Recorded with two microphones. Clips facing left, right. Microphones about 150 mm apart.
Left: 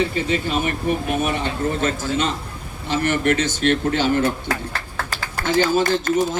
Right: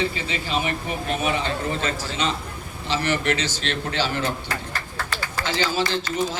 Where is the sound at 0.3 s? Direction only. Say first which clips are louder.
Left 5 dB; 50° left (ahead or behind).